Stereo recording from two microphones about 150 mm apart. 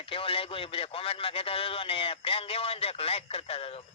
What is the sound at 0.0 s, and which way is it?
Speech, 35° left (ahead or behind).